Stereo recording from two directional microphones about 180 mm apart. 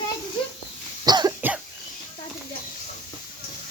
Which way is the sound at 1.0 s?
20° right (ahead or behind).